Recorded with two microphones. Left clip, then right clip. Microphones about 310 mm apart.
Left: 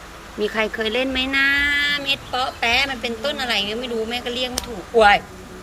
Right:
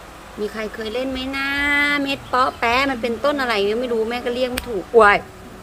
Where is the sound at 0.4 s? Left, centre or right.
Centre.